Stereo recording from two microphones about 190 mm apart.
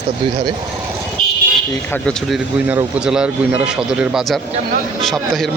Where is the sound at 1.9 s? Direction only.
5° left (ahead or behind).